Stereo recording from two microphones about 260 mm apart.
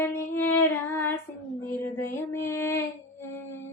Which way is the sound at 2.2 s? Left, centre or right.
Centre.